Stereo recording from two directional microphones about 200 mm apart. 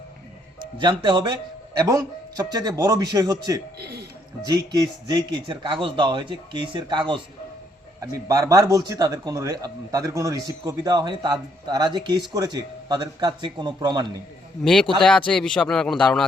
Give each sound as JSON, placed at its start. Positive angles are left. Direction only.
{"t": 0.8, "sound": "a man's voice", "side_deg": -25}
{"t": 3.8, "sound": "a man's voice", "side_deg": -55}
{"t": 4.4, "sound": "a man's voice", "side_deg": -20}
{"t": 14.6, "sound": "a man's voice", "side_deg": 0}